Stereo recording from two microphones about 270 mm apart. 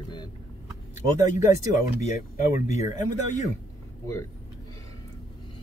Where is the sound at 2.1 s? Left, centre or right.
Left.